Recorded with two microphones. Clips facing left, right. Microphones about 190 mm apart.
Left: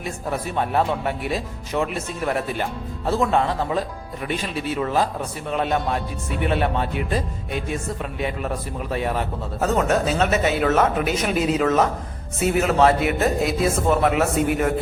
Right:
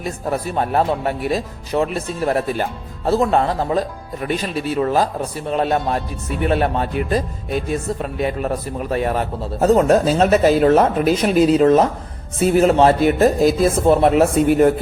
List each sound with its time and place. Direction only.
0.0 s speech: 40° right (ahead or behind)